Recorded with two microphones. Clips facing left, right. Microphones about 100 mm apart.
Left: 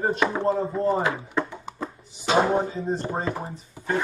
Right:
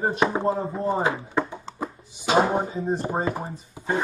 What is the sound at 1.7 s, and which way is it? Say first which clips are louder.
Music: right 2 dB; 15° right (ahead or behind).